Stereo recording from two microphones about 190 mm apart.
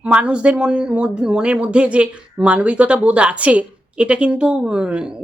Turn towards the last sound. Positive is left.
turn(degrees=-5)  # may be behind; listen again after turning